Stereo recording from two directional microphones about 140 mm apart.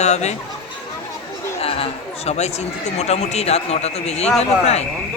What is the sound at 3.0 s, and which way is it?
A man's voice, 50° left (ahead or behind).